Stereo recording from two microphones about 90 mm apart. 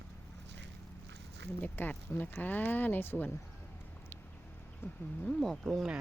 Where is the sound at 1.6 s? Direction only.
20° left (ahead or behind).